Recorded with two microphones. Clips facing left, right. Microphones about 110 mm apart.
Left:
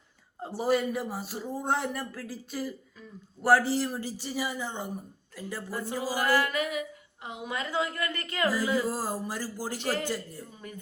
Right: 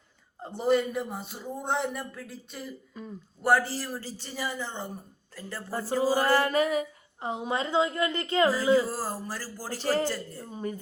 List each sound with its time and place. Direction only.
0.4 s a man's voice: 5° left (ahead or behind)
3.7 s a woman's voice: 15° left (ahead or behind)
5.7 s a sound: 35° right (ahead or behind); by 8.9 s 20° right (ahead or behind)
8.9 s a woman's voice: 15° left (ahead or behind)
9.7 s a sound: 35° right (ahead or behind)
10.5 s speech: 35° right (ahead or behind)